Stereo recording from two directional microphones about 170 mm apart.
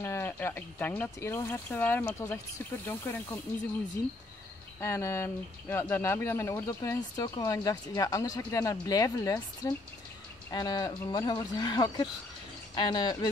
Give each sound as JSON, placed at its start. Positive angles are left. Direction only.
{"t": 0.0, "sound": "speech", "side_deg": 15}
{"t": 4.7, "sound": "speech", "side_deg": 15}